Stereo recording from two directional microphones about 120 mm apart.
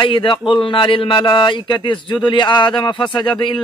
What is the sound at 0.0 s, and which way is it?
A man's voice, 45° left (ahead or behind).